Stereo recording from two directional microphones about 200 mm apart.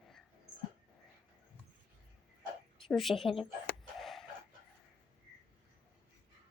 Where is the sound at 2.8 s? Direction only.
Centre (ahead or behind).